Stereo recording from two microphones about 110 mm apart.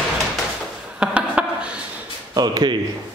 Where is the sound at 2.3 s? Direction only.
40° right (ahead or behind).